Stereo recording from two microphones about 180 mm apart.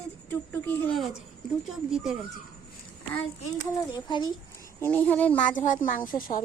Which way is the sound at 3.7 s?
25° left (ahead or behind).